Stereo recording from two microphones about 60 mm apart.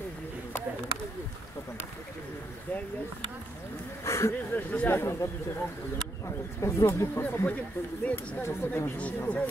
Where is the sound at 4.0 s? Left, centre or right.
Left.